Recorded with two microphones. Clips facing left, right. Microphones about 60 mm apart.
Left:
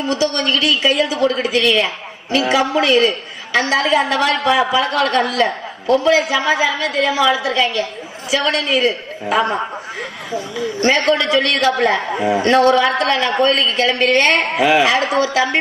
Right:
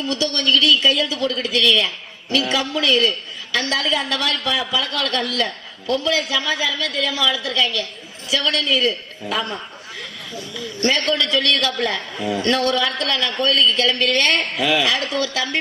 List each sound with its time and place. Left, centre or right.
0.0 s a woman's voice: left
10.8 s a man's voice: left